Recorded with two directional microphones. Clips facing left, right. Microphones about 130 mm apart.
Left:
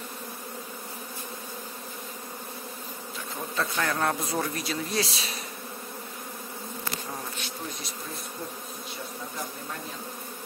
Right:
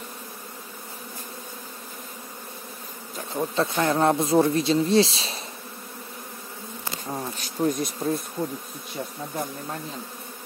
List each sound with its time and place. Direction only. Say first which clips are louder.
3.2 s speech: right 7 dB; 30° right (ahead or behind)
7.3 s bee: right 12 dB; 40° right (ahead or behind)